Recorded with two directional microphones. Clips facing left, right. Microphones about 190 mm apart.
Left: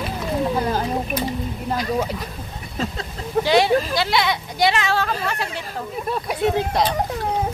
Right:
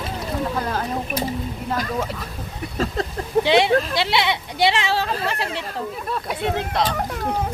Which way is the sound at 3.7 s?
Centre (ahead or behind).